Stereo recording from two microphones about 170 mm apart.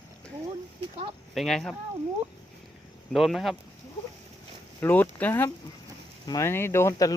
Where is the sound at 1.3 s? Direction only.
Centre (ahead or behind).